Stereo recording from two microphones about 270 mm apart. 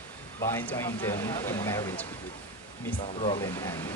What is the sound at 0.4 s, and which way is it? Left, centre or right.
Speech, centre.